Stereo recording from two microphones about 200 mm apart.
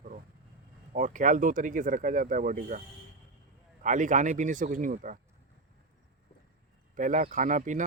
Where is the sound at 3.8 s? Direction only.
40° right (ahead or behind).